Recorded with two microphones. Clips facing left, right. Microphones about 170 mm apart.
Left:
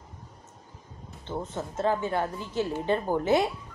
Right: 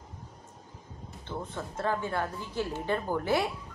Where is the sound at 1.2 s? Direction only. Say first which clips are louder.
Left 4 dB; 20° left (ahead or behind).